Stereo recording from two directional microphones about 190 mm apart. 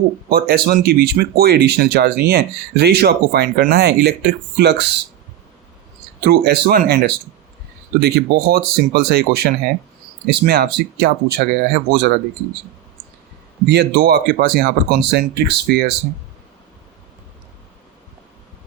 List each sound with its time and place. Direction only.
0.3 s speech: 55° right (ahead or behind)
6.2 s speech: 60° right (ahead or behind)
13.7 s speech: 65° right (ahead or behind)